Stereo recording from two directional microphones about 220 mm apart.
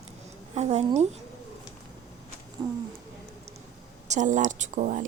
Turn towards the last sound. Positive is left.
turn(degrees=-35)  # may be behind; listen again after turning